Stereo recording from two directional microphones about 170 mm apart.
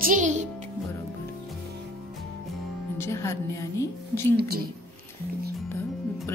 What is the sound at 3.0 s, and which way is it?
A woman's voice, 15° left (ahead or behind).